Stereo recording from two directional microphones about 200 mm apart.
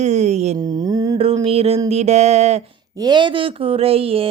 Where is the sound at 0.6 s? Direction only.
20° right (ahead or behind).